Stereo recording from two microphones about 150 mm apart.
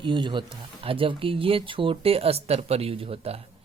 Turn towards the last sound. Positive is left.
turn(degrees=-40)  # may be behind; listen again after turning